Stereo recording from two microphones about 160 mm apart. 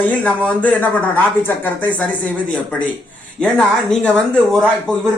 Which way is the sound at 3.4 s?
5° left (ahead or behind).